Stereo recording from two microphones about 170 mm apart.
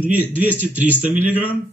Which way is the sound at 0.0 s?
10° right (ahead or behind).